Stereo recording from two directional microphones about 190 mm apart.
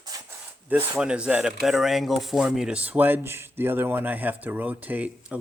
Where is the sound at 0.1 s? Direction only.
20° right (ahead or behind).